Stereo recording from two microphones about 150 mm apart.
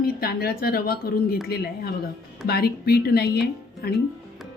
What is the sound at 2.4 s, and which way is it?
Speech, 90° left.